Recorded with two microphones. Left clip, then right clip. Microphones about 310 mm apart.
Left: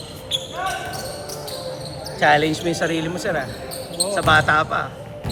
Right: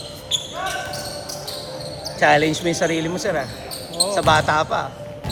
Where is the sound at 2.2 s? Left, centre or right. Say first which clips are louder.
Right 1 dB; right.